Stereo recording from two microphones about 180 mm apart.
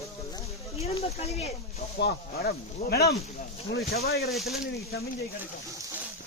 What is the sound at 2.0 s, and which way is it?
Speech, 60° left (ahead or behind).